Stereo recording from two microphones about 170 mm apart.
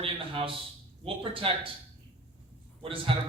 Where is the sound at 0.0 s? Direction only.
30° right (ahead or behind).